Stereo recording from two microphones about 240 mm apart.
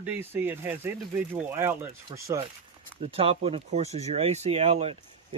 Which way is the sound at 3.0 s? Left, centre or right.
Right.